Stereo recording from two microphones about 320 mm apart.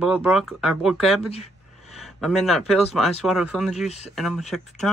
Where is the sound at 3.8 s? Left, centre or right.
Centre.